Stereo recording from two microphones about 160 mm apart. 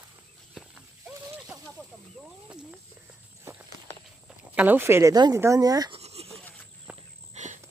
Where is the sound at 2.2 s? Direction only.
5° right (ahead or behind).